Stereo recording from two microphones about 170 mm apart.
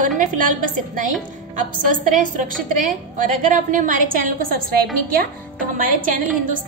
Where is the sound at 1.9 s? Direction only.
50° right (ahead or behind).